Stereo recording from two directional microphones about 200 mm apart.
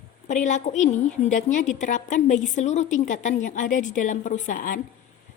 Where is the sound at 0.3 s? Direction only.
35° left (ahead or behind).